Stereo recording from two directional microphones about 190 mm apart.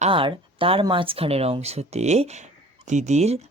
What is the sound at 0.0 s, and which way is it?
Speech, 30° right (ahead or behind).